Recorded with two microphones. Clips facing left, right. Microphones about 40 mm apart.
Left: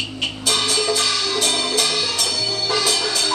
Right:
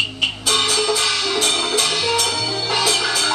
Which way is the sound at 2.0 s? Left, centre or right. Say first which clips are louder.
Right 3 dB; right.